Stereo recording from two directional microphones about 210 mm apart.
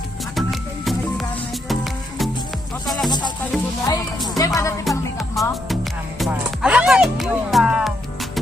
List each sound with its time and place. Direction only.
1.6 s music: centre (ahead or behind)
3.1 s music: 20° left (ahead or behind)
4.9 s music: centre (ahead or behind)